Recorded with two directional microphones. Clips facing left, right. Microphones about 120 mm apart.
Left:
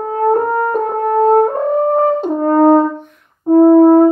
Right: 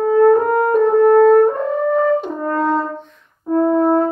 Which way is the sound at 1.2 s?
40° left (ahead or behind).